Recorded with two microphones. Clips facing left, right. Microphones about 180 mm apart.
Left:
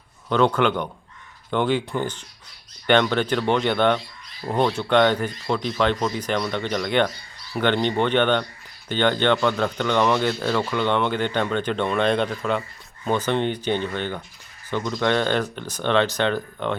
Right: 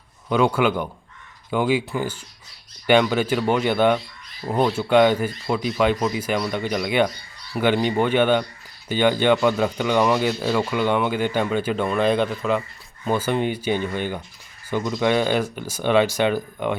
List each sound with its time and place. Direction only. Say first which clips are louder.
0.3 s speech: even; 10° right (ahead or behind)